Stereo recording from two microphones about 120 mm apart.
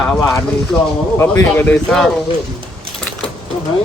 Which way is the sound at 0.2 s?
25° left (ahead or behind).